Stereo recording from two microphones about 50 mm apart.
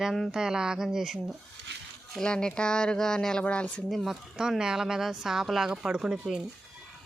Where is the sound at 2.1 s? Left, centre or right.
Centre.